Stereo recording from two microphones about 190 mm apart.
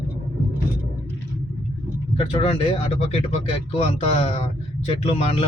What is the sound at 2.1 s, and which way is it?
Speech, 30° left (ahead or behind).